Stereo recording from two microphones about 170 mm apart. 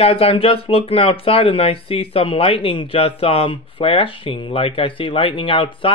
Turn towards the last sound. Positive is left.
turn(degrees=30)  # may be behind; listen again after turning